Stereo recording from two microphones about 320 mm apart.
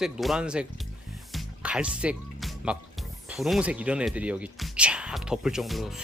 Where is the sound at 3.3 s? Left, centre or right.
Centre.